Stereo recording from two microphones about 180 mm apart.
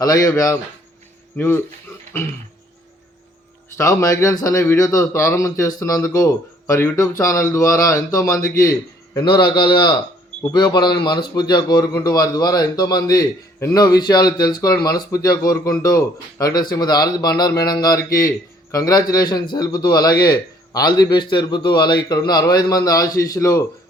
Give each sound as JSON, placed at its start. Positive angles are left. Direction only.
{"t": 0.3, "sound": "speech", "side_deg": 15}
{"t": 3.8, "sound": "a man's voice", "side_deg": 15}